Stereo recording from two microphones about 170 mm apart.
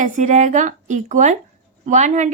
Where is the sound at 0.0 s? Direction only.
45° right (ahead or behind).